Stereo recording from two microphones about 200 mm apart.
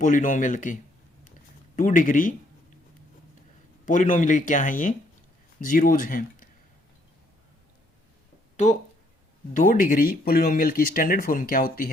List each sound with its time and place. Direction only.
0.0 s speech: 40° left (ahead or behind)
3.8 s speech: 40° left (ahead or behind)
8.5 s speech: 35° left (ahead or behind)